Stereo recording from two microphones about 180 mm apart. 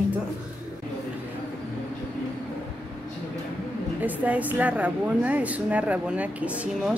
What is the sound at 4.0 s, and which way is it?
A woman's voice, 10° right (ahead or behind).